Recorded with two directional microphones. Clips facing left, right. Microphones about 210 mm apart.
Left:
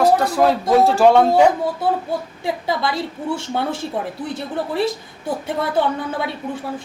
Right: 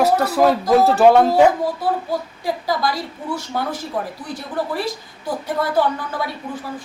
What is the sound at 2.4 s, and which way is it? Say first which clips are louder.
A woman's voice: even; 25° left (ahead or behind).